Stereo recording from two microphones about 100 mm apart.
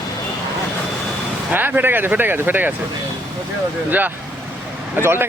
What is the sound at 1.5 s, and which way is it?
A man's voice, 20° right (ahead or behind).